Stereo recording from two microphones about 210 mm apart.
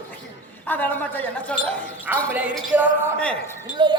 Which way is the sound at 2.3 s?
5° right (ahead or behind).